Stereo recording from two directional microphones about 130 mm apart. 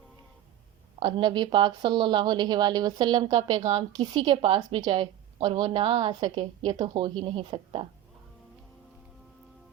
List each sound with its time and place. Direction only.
0.9 s speech: 40° right (ahead or behind)
3.7 s a woman's voice: 60° right (ahead or behind)
4.3 s speech: 40° right (ahead or behind)
6.4 s speech: 45° right (ahead or behind)
6.7 s speech: 35° right (ahead or behind)